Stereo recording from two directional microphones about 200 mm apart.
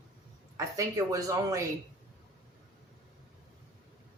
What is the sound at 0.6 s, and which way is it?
Speech, 15° right (ahead or behind).